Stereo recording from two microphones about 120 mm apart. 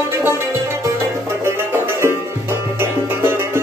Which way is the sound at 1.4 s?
20° right (ahead or behind).